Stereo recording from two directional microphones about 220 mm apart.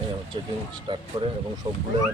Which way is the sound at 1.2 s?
20° right (ahead or behind).